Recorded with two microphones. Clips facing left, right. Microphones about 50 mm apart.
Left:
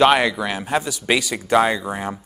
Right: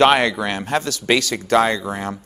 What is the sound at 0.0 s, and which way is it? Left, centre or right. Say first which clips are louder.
Speech: right 1 dB; centre.